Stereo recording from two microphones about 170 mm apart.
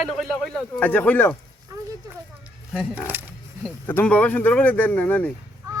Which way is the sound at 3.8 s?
10° left (ahead or behind).